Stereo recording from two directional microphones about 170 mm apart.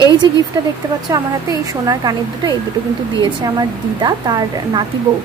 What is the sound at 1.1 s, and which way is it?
A woman's voice, 20° right (ahead or behind).